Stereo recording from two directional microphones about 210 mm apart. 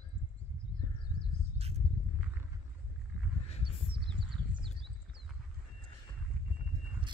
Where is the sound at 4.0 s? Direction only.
Centre (ahead or behind).